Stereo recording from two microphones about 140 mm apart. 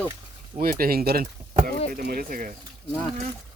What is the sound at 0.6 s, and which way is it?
Speech, 90° right.